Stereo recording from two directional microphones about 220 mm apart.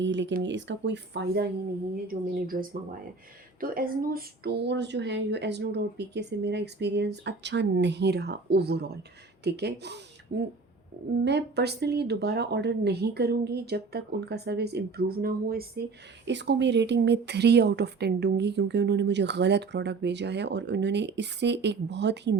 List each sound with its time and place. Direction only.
0.0 s speech: 55° right (ahead or behind)